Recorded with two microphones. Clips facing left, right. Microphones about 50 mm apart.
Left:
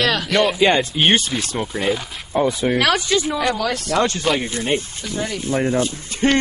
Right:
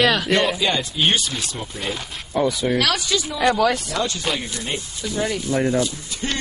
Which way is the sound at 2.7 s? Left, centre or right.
Centre.